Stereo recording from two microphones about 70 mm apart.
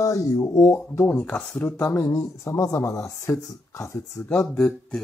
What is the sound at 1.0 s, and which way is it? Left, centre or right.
Speech, centre.